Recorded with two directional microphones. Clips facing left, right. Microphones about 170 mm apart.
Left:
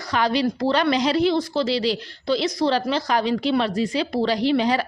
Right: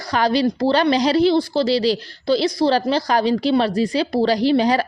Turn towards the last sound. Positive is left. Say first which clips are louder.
# right 3 dB
turn(degrees=-40)  # may be behind; listen again after turning